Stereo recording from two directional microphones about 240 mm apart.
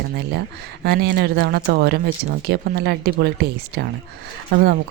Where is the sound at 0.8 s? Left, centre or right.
Right.